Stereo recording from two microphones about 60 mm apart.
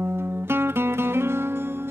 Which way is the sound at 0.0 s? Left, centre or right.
Right.